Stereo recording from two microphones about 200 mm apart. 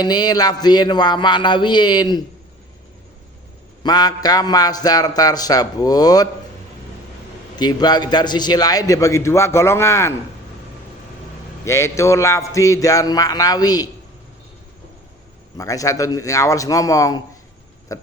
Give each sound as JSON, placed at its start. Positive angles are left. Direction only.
{"t": 0.0, "sound": "a man's voice", "side_deg": 20}
{"t": 3.8, "sound": "a man's voice", "side_deg": 20}
{"t": 7.5, "sound": "a man's voice", "side_deg": 20}
{"t": 11.6, "sound": "a man's voice", "side_deg": 15}
{"t": 15.5, "sound": "a man's voice", "side_deg": 15}
{"t": 17.9, "sound": "a sound", "side_deg": 15}